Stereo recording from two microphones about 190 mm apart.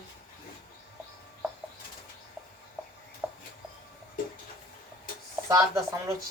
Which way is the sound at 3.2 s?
5° left (ahead or behind).